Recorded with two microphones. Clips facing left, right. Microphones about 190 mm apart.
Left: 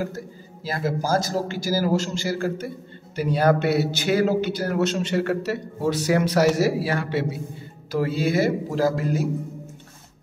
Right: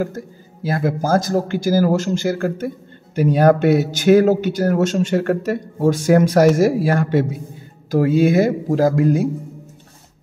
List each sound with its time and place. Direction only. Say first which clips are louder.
0.7 s speech: right 5 dB; 55° right (ahead or behind)